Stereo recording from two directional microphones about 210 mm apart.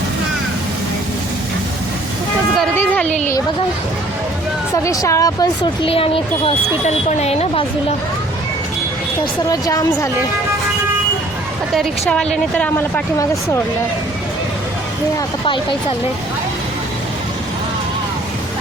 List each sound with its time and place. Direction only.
2.6 s speech: 5° left (ahead or behind)
4.7 s speech: 15° left (ahead or behind)
9.5 s a woman's voice: 15° left (ahead or behind)
11.7 s a woman's voice: centre (ahead or behind)